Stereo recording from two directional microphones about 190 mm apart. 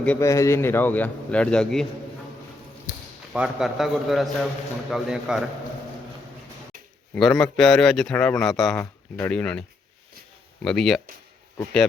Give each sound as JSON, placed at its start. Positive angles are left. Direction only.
{"t": 0.0, "sound": "a man's voice", "side_deg": 10}
{"t": 2.9, "sound": "a sound", "side_deg": 45}
{"t": 3.3, "sound": "a man's voice", "side_deg": -5}
{"t": 7.2, "sound": "a man's voice", "side_deg": 5}